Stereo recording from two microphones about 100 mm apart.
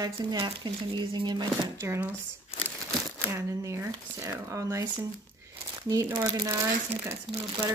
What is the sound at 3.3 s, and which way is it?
Speech, 30° right (ahead or behind).